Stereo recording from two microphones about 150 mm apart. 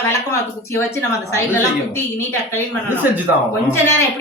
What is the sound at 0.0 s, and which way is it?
A woman's voice, 20° left (ahead or behind).